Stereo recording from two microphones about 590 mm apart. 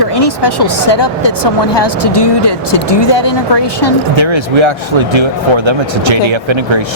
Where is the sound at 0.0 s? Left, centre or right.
Left.